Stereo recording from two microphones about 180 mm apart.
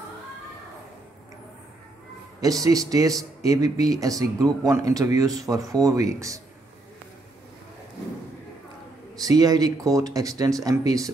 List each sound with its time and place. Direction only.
2.4 s speech: 20° right (ahead or behind)
9.2 s speech: 20° right (ahead or behind)